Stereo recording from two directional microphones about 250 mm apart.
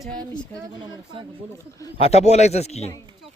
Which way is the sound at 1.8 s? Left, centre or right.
Left.